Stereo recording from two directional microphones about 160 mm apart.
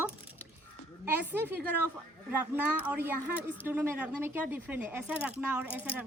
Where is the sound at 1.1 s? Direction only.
10° right (ahead or behind).